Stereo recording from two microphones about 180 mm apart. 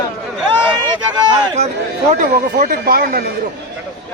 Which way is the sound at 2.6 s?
55° right (ahead or behind).